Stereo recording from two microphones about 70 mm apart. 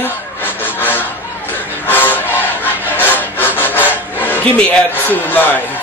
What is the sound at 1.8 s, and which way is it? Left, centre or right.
Vehicle, left.